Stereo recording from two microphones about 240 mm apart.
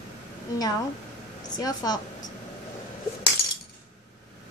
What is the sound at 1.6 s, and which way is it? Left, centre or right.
Child singing, centre.